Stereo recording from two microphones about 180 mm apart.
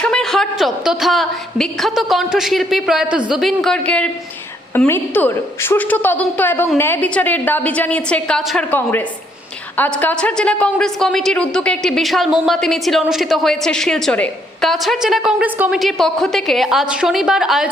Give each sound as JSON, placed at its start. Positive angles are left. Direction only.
{"t": 0.0, "sound": "a woman's voice", "side_deg": 5}